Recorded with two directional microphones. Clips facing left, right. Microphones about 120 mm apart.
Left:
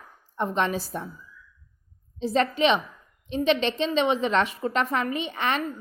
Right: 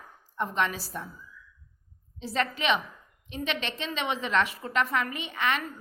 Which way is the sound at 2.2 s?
25° left (ahead or behind).